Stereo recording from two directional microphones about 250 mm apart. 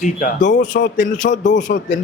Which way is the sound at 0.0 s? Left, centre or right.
Left.